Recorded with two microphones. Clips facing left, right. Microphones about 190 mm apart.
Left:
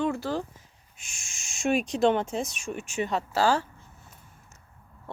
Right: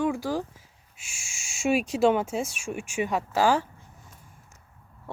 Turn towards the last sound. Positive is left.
turn(degrees=-15)  # may be behind; listen again after turning